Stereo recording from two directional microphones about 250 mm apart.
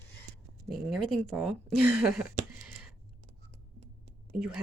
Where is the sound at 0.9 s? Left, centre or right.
Centre.